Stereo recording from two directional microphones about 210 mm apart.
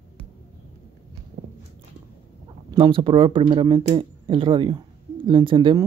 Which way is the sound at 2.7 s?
25° right (ahead or behind).